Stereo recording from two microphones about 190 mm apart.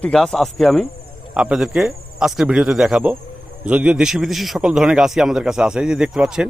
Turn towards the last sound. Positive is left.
turn(degrees=-5)  # may be behind; listen again after turning